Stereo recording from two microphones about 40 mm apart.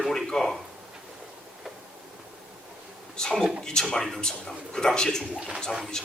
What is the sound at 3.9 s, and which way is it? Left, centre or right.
Speech, centre.